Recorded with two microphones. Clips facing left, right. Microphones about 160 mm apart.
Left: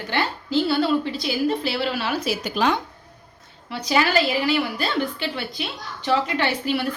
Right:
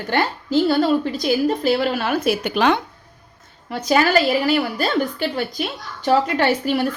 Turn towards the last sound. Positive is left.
turn(degrees=-45)  # may be behind; listen again after turning